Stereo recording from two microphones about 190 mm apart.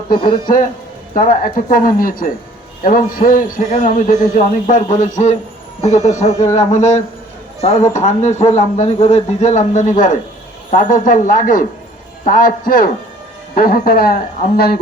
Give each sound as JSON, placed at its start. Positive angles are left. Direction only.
{"t": 0.2, "sound": "a man's voice", "side_deg": 25}
{"t": 1.1, "sound": "a woman's voice", "side_deg": 45}